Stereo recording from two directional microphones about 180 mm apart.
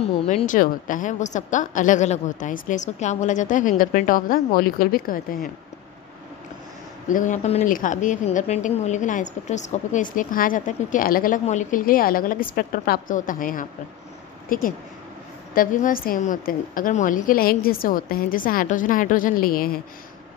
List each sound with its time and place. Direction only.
0.0 s speech: 35° left (ahead or behind)
7.1 s speech: 45° left (ahead or behind)